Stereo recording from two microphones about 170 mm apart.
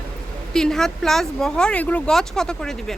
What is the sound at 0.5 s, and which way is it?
Speech, 5° left (ahead or behind).